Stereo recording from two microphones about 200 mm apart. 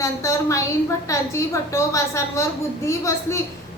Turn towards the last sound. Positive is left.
turn(degrees=15)  # may be behind; listen again after turning